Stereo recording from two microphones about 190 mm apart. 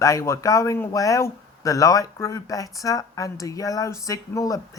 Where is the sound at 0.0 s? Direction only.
15° left (ahead or behind).